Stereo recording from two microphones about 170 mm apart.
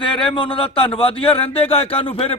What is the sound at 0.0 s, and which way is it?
A man's voice, 30° left (ahead or behind).